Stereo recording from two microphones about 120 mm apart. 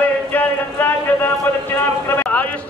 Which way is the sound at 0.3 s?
15° left (ahead or behind).